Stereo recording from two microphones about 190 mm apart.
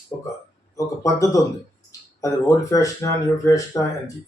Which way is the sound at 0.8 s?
15° left (ahead or behind).